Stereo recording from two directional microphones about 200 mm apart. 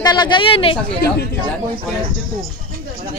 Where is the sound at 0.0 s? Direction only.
20° left (ahead or behind).